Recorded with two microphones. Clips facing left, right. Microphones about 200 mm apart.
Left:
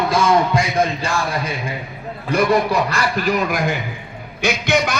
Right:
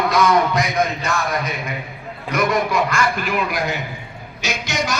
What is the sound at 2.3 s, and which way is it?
A man's voice, 30° left (ahead or behind).